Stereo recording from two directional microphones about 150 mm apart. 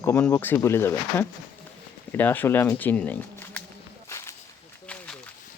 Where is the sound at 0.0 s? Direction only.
15° left (ahead or behind).